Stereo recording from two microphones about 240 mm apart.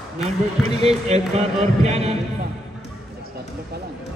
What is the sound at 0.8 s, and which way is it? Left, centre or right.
A man's voice, right.